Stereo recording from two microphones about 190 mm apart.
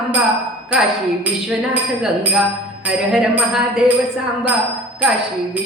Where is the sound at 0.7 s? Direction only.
5° right (ahead or behind).